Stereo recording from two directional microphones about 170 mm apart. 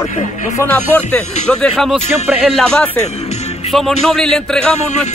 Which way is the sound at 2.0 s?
10° right (ahead or behind).